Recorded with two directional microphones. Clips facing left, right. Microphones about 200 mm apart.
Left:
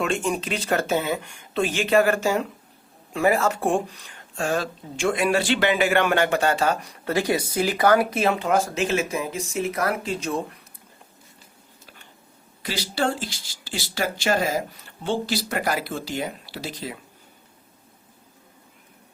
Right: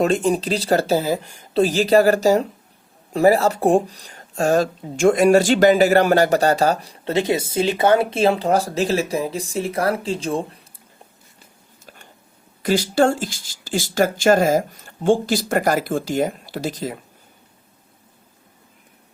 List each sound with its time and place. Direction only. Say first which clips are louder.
0.0 s speech: right 7 dB; 35° right (ahead or behind)
12.6 s speech: right 9 dB; 50° right (ahead or behind)